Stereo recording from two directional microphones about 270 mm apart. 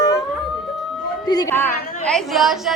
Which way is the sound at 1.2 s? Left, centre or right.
Centre.